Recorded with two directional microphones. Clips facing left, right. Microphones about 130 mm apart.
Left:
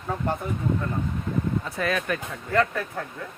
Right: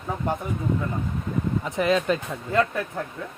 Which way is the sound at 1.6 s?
20° right (ahead or behind).